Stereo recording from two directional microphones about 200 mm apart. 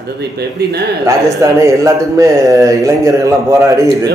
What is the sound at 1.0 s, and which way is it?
Speech, 15° right (ahead or behind).